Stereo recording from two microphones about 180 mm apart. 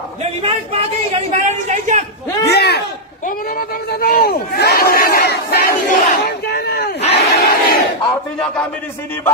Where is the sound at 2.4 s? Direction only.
65° left (ahead or behind).